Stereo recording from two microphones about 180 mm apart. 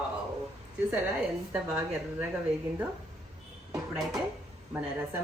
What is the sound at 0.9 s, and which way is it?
A woman's voice, 10° right (ahead or behind).